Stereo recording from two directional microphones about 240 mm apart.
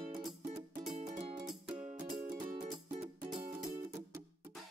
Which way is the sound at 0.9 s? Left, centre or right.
Right.